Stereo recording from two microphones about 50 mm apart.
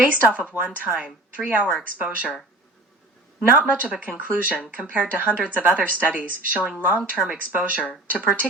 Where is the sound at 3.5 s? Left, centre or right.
Right.